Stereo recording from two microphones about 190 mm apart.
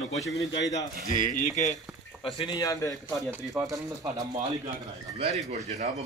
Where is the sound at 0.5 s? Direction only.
70° left (ahead or behind).